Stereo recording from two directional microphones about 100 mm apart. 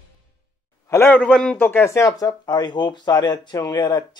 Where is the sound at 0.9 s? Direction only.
20° left (ahead or behind).